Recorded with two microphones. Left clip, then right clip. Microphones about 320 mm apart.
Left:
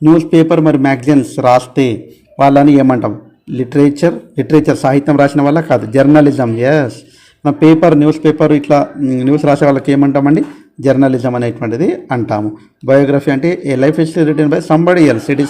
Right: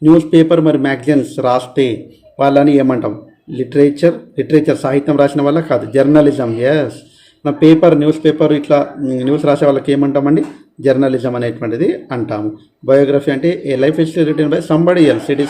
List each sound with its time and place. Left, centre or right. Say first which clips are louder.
0.0 s speech: even; left